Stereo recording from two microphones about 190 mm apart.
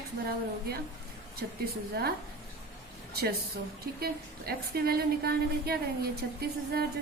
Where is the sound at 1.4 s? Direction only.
65° right (ahead or behind).